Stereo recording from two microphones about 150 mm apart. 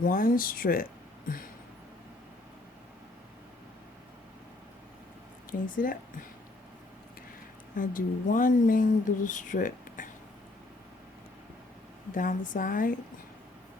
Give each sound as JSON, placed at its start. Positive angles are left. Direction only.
{"t": 0.0, "sound": "speech", "side_deg": 70}
{"t": 5.5, "sound": "speech", "side_deg": 65}
{"t": 7.8, "sound": "speech", "side_deg": 65}
{"t": 12.1, "sound": "speech", "side_deg": 60}